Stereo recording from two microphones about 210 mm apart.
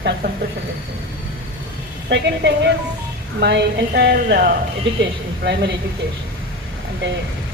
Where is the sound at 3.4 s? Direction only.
50° right (ahead or behind).